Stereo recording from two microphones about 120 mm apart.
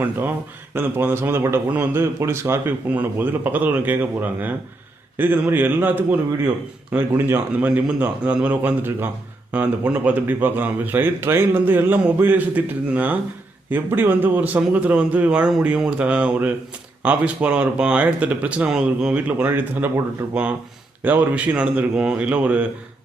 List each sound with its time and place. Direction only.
0.7 s speech: 20° right (ahead or behind)
7.2 s speech: 15° right (ahead or behind)
21.0 s speech: 15° right (ahead or behind)